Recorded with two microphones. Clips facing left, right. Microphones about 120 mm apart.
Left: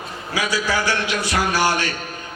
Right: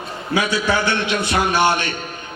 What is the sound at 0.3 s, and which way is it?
A man's voice, 25° right (ahead or behind).